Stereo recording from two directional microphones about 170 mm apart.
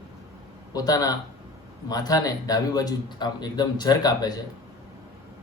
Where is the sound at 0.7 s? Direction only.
20° left (ahead or behind).